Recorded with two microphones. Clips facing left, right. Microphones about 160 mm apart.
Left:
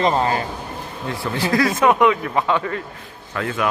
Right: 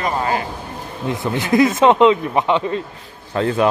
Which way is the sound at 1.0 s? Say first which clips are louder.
Right 3 dB; 20° right (ahead or behind).